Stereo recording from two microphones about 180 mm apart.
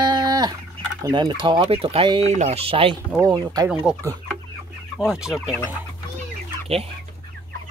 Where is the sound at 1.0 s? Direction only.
25° right (ahead or behind).